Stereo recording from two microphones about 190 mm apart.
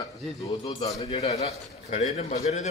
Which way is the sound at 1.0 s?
35° left (ahead or behind).